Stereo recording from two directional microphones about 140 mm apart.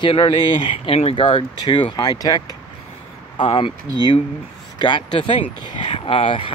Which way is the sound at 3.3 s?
35° left (ahead or behind).